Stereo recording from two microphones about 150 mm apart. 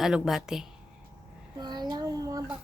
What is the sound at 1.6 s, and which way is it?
Child singing, 30° right (ahead or behind).